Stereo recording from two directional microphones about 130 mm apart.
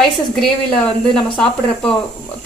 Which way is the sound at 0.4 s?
5° left (ahead or behind).